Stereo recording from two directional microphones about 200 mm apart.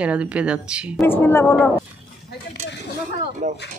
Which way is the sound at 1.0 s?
10° left (ahead or behind).